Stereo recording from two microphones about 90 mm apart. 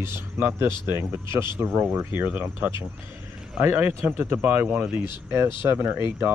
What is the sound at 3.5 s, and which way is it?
Speech, 20° right (ahead or behind).